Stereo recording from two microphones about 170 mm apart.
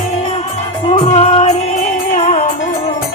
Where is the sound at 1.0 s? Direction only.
40° left (ahead or behind).